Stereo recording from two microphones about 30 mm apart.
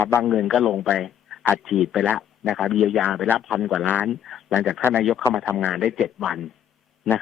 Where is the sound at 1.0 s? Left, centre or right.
Centre.